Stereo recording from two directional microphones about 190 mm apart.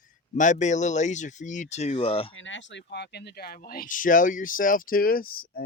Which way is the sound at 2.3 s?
80° left.